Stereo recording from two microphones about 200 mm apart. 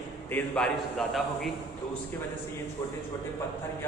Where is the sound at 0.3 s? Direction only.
10° left (ahead or behind).